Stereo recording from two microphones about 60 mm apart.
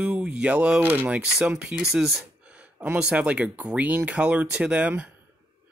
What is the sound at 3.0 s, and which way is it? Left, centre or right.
Speech, centre.